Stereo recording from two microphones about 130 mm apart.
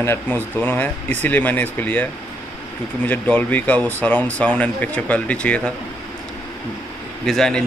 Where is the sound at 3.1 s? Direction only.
15° left (ahead or behind).